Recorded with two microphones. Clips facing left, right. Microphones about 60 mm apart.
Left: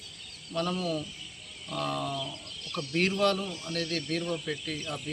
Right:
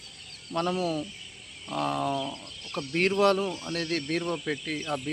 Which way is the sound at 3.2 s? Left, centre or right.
Right.